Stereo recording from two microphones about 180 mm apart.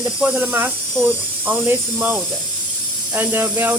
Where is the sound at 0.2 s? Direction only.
5° right (ahead or behind).